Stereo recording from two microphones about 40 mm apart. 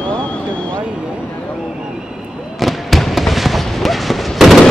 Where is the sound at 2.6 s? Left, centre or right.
Centre.